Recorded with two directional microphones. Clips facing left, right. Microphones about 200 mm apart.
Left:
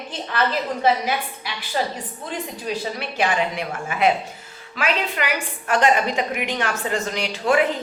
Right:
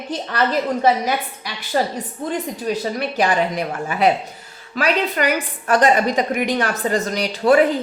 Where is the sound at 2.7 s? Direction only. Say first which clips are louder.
Right 5 dB; 45° right (ahead or behind).